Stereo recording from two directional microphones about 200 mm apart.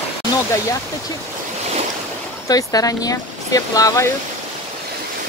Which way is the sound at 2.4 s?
20° left (ahead or behind).